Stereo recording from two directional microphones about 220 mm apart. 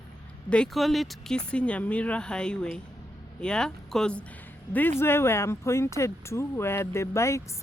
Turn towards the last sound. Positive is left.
turn(degrees=10)  # may be behind; listen again after turning